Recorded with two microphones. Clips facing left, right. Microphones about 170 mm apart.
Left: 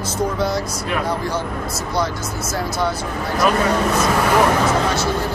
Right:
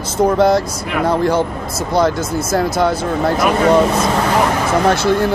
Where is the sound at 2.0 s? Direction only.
50° right (ahead or behind).